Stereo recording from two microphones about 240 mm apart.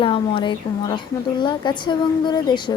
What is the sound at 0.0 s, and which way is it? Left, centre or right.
A woman's voice, left.